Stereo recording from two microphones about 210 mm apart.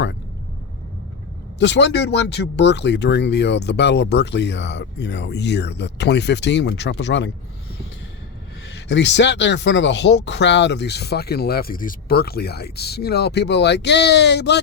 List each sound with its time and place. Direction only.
1.5 s speech: 55° left (ahead or behind)
8.9 s speech: 55° left (ahead or behind)